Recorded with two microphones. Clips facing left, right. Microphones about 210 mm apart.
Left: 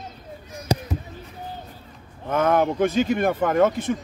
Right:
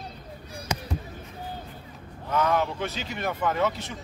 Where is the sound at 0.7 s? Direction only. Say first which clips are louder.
Left 8 dB; 35° left (ahead or behind).